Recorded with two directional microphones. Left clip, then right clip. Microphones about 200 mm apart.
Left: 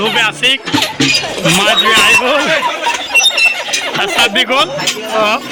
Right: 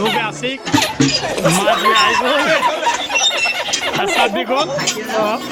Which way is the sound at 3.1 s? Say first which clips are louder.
Left 10 dB; centre (ahead or behind).